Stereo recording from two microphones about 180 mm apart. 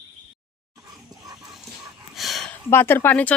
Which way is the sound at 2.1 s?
Centre (ahead or behind).